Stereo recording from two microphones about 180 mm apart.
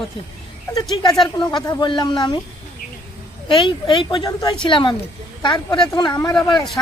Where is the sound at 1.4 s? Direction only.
20° left (ahead or behind).